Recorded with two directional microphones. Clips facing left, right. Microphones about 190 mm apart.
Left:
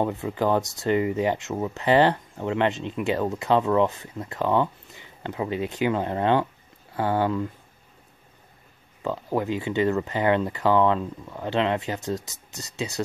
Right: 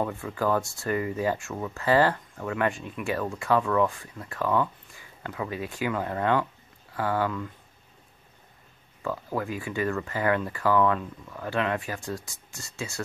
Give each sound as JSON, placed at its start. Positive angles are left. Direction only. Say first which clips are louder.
{"t": 0.0, "sound": "speech", "louder": "left 3 dB", "side_deg": 20}
{"t": 9.0, "sound": "speech", "louder": "left 4 dB", "side_deg": 25}